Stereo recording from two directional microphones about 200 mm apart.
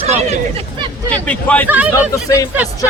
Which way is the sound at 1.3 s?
5° left (ahead or behind).